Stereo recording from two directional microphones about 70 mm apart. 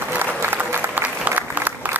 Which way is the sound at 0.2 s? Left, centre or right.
Right.